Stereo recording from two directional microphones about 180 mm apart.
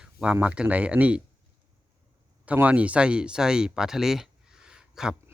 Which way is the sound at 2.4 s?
10° right (ahead or behind).